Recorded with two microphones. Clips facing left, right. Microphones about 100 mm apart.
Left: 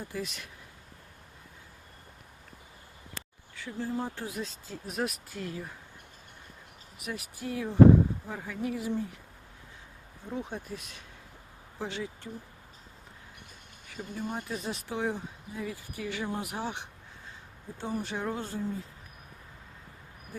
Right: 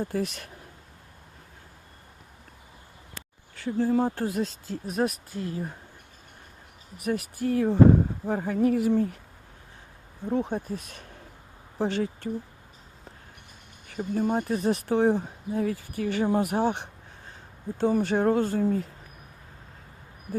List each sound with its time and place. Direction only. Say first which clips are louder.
0.0 s speech: right 8 dB; 50° right (ahead or behind)
3.5 s speech: right 10 dB; 50° right (ahead or behind)
4.9 s speech: right 6 dB; 35° right (ahead or behind)
7.0 s speech: right 10 dB; 55° right (ahead or behind)
10.2 s speech: right 9 dB; 55° right (ahead or behind)
13.8 s speech: right 10 dB; 50° right (ahead or behind)
17.7 s speech: right 11 dB; 70° right (ahead or behind)